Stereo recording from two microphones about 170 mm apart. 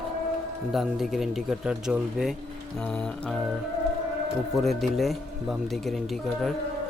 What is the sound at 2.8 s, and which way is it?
Music, 5° left (ahead or behind).